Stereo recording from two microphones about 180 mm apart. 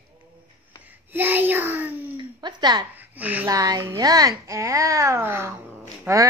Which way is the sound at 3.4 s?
20° right (ahead or behind).